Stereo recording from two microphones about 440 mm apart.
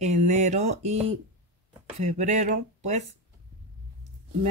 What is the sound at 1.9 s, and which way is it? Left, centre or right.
Speech, centre.